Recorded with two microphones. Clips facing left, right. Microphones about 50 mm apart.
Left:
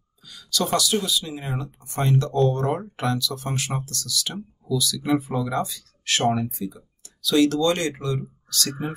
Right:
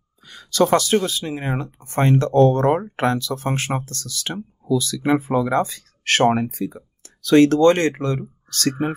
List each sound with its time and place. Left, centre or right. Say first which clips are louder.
0.2 s speech: right 8 dB; right